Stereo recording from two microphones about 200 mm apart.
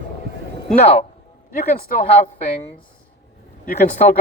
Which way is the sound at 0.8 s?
30° left (ahead or behind).